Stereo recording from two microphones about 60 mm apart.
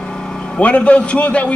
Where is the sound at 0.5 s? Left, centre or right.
Left.